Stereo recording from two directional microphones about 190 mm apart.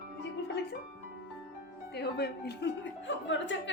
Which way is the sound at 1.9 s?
60° left (ahead or behind).